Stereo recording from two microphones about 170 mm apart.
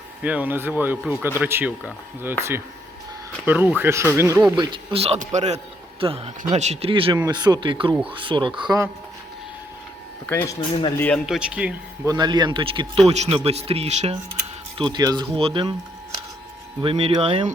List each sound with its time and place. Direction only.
0.2 s speech: 10° right (ahead or behind)
3.4 s speech: 10° right (ahead or behind)
4.5 s speech: 25° right (ahead or behind)
10.2 s speech: 10° left (ahead or behind)
11.3 s speech: 5° right (ahead or behind)
12.0 s speech: 25° right (ahead or behind)
13.1 s speech: 40° right (ahead or behind)
14.8 s speech: 25° right (ahead or behind)
16.8 s speech: 35° right (ahead or behind)